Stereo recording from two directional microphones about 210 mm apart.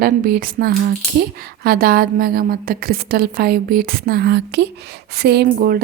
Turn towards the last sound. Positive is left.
turn(degrees=-45)  # may be behind; listen again after turning